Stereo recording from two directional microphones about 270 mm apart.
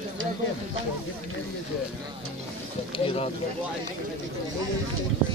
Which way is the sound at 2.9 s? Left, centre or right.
Centre.